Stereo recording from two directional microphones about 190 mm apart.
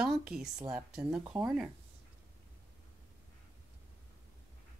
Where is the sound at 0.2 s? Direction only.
5° right (ahead or behind).